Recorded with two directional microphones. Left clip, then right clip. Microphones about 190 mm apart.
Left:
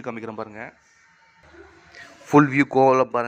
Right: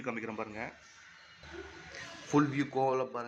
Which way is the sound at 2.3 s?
40° left (ahead or behind).